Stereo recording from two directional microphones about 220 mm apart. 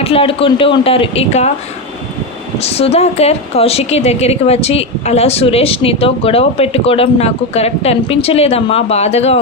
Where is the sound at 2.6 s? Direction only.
30° left (ahead or behind).